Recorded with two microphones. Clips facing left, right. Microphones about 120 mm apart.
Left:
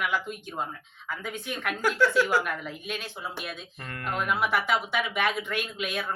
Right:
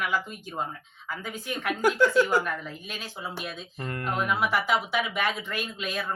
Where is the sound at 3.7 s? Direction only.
30° right (ahead or behind).